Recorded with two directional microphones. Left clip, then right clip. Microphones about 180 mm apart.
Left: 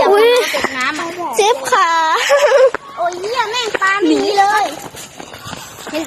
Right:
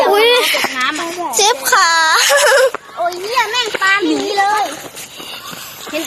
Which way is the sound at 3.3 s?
35° right (ahead or behind).